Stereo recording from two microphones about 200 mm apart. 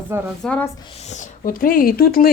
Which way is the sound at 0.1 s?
10° right (ahead or behind).